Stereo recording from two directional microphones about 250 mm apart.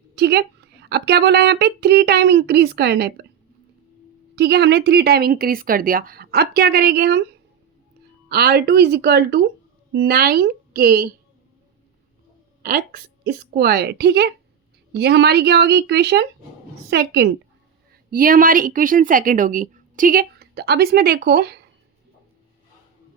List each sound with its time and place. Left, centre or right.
0.2 s speech: right
4.4 s speech: right
8.3 s a woman's voice: right
12.6 s speech: right